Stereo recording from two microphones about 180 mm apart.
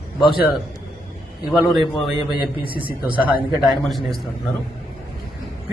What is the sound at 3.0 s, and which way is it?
Speech, 10° right (ahead or behind).